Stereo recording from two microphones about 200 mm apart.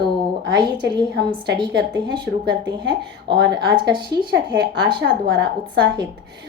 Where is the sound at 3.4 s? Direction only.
55° right (ahead or behind).